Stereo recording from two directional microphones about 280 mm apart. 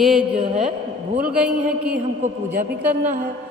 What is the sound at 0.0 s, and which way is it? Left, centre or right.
A man's voice, centre.